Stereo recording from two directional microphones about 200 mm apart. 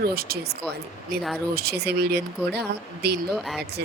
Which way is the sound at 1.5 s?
50° right (ahead or behind).